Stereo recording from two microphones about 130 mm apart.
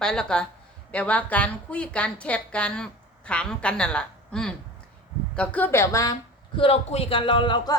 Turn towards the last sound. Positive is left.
turn(degrees=35)  # may be behind; listen again after turning